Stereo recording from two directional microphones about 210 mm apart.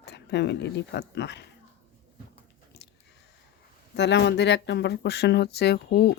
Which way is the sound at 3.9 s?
55° left (ahead or behind).